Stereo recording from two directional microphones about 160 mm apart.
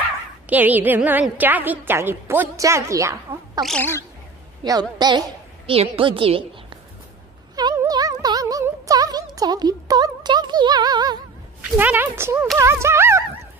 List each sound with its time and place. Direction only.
0.5 s a woman's voice: 10° right (ahead or behind)
3.6 s speech: 10° left (ahead or behind)
4.6 s a woman's voice: 30° right (ahead or behind)
7.5 s a sound: 25° right (ahead or behind)
11.7 s a woman's voice: 10° right (ahead or behind)